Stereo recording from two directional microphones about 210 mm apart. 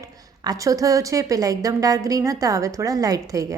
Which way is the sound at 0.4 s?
15° right (ahead or behind).